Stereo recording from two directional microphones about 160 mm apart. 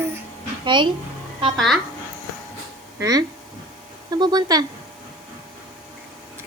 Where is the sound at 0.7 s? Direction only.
30° right (ahead or behind).